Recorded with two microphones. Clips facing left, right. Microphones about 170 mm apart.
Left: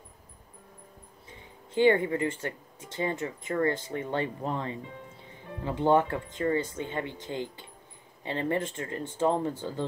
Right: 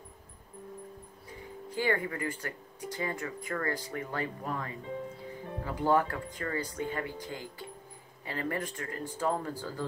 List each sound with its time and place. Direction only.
1.7 s speech: 25° left (ahead or behind)